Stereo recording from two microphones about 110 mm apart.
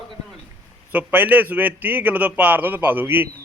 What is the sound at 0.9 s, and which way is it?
A man's voice, 15° right (ahead or behind).